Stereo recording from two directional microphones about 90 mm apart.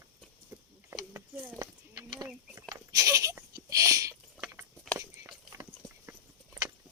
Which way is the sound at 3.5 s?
40° right (ahead or behind).